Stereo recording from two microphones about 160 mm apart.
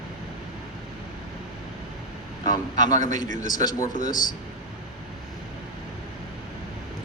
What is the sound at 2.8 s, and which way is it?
Speech, 25° left (ahead or behind).